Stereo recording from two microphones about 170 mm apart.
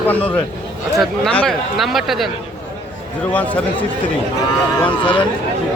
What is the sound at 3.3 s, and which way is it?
Speech, 10° left (ahead or behind).